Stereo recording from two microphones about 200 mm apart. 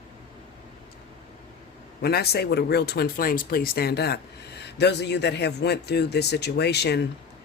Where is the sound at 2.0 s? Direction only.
50° left (ahead or behind).